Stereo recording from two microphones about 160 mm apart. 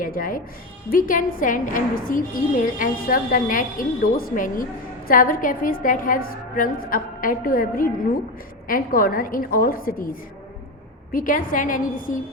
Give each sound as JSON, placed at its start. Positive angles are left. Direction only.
{"t": 0.0, "sound": "a woman's voice", "side_deg": 60}